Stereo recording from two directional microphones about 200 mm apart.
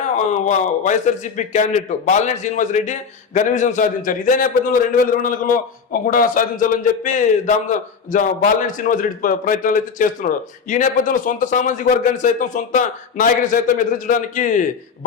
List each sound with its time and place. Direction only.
0.3 s a man's voice: 35° left (ahead or behind)